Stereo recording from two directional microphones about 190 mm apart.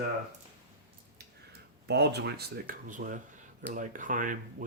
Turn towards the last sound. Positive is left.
turn(degrees=-45)  # may be behind; listen again after turning